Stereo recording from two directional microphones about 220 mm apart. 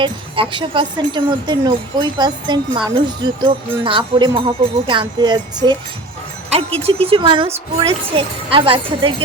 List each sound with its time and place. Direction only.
0.0 s speech: 20° right (ahead or behind)
6.8 s speech: 25° right (ahead or behind)